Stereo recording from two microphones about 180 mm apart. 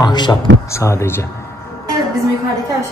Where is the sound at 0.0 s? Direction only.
25° left (ahead or behind).